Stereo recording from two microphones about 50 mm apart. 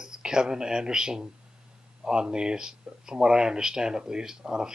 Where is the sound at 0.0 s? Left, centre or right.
Centre.